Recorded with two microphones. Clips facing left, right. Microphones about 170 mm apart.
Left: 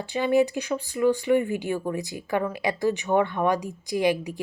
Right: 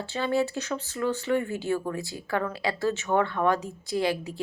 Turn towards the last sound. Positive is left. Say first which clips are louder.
# left 3 dB
turn(degrees=15)  # may be behind; listen again after turning